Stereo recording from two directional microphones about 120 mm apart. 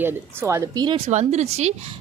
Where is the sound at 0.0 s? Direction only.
20° right (ahead or behind).